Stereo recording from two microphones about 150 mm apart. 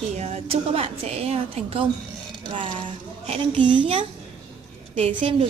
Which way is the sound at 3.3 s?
30° right (ahead or behind).